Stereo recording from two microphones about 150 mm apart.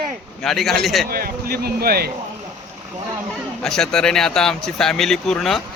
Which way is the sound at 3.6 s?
5° left (ahead or behind).